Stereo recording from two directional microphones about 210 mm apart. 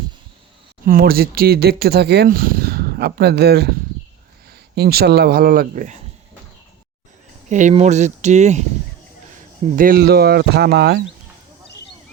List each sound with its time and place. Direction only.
0.9 s speech: 45° right (ahead or behind)
7.5 s speech: 35° right (ahead or behind)
9.7 s speech: 45° right (ahead or behind)